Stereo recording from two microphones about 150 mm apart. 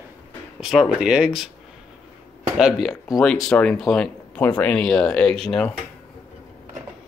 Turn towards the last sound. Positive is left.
turn(degrees=5)  # may be behind; listen again after turning